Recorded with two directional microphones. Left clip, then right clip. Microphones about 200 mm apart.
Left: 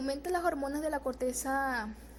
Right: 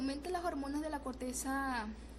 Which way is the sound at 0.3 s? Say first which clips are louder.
Left 8 dB; 25° left (ahead or behind).